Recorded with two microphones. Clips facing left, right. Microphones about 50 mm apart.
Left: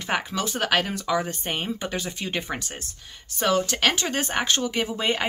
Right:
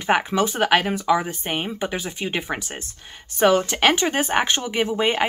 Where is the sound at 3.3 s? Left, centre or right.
Right.